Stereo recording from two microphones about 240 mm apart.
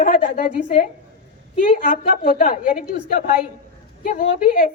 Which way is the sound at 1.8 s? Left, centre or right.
Left.